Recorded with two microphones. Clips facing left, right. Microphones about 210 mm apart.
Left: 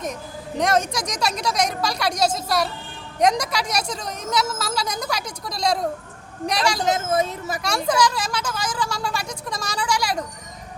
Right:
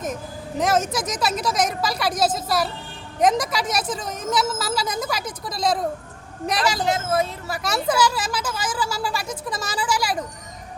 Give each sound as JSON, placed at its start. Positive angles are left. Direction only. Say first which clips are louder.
{"t": 0.6, "sound": "a woman's voice", "louder": "even", "side_deg": -5}
{"t": 6.8, "sound": "speech", "louder": "left 1 dB", "side_deg": 20}
{"t": 7.6, "sound": "a woman's voice", "louder": "even", "side_deg": -5}